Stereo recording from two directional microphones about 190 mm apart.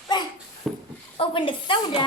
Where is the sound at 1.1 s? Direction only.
25° left (ahead or behind).